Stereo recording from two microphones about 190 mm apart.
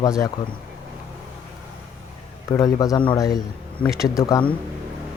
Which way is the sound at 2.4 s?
15° left (ahead or behind).